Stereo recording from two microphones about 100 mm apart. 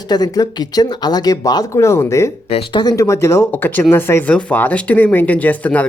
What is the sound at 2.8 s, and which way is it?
Speech, 35° left (ahead or behind).